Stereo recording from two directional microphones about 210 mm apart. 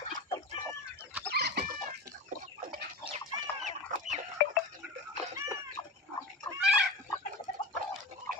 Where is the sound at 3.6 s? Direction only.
35° right (ahead or behind).